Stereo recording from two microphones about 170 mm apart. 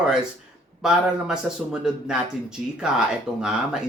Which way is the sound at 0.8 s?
5° right (ahead or behind).